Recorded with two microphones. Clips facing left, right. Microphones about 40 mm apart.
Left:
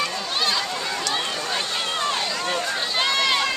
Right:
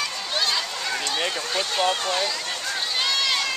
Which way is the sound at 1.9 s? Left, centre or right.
Centre.